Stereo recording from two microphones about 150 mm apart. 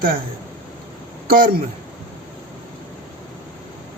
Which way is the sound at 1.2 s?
75° right (ahead or behind).